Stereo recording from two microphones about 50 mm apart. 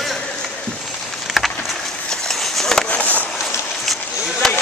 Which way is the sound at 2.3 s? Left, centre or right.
Centre.